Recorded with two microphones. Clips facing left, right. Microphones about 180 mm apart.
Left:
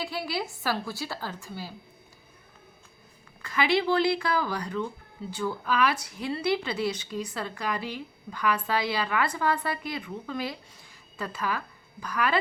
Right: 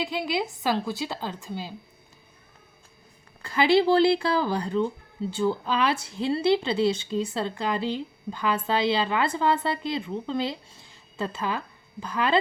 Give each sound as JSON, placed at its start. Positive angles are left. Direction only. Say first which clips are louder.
{"t": 0.0, "sound": "speech", "louder": "right 4 dB", "side_deg": -20}
{"t": 3.4, "sound": "speech", "louder": "right 5 dB", "side_deg": -30}